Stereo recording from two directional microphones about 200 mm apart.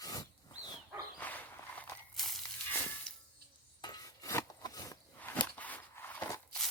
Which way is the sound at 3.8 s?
20° left (ahead or behind).